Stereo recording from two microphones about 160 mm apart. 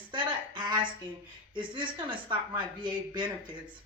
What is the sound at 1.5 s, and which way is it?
Speech, 30° right (ahead or behind).